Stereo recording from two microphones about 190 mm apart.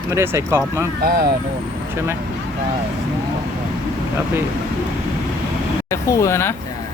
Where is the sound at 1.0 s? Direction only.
50° right (ahead or behind).